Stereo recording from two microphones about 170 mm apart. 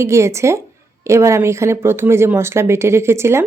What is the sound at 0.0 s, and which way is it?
Speech, 15° right (ahead or behind).